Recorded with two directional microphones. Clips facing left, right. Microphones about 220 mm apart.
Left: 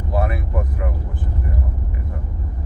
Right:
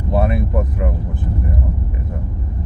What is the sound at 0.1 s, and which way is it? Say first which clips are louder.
Vehicle: right 5 dB; 25° right (ahead or behind).